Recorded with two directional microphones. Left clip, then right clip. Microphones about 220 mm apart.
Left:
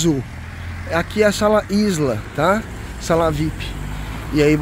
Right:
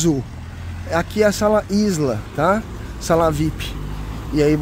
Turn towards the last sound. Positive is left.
turn(degrees=0)  # may be behind; listen again after turning